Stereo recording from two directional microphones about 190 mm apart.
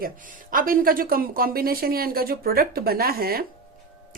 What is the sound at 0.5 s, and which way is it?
Speech, 50° right (ahead or behind).